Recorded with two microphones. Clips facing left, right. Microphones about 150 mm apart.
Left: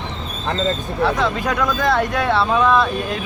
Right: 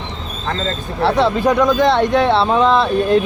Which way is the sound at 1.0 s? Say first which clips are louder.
Right 5 dB; 30° right (ahead or behind).